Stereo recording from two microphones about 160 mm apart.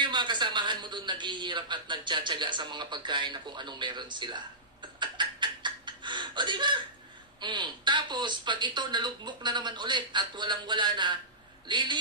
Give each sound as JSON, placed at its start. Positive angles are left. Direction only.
{"t": 0.0, "sound": "a man's voice", "side_deg": -30}
{"t": 5.0, "sound": "a sound", "side_deg": -30}
{"t": 7.3, "sound": "a woman's voice", "side_deg": -30}